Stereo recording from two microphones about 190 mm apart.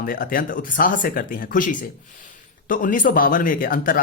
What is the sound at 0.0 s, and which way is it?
Speech, 50° left (ahead or behind).